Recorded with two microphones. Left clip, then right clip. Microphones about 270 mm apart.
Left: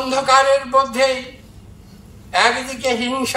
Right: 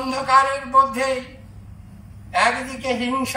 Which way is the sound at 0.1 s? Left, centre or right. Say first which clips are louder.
Left 4 dB; centre.